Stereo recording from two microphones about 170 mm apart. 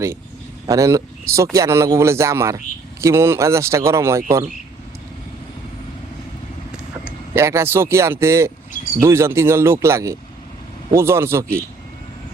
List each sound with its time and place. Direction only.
0.7 s speech: 20° right (ahead or behind)
7.0 s speech: 15° right (ahead or behind)